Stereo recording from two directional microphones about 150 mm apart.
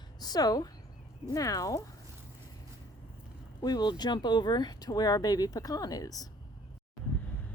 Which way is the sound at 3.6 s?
25° left (ahead or behind).